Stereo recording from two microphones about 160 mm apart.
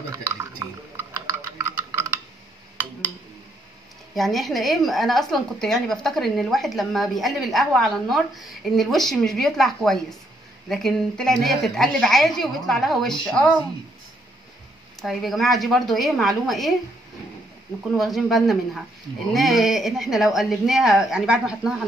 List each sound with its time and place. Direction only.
0.2 s a sound: 15° right (ahead or behind)
4.1 s a woman's voice: centre (ahead or behind)
15.0 s a woman's voice: centre (ahead or behind)
17.9 s a woman's voice: centre (ahead or behind)